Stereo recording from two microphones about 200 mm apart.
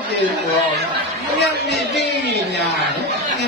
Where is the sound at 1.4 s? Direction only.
55° left (ahead or behind).